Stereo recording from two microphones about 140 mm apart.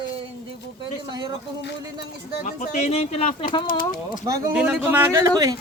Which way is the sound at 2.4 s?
65° left (ahead or behind).